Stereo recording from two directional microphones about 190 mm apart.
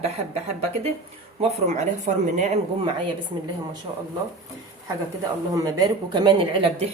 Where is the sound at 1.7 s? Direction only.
35° right (ahead or behind).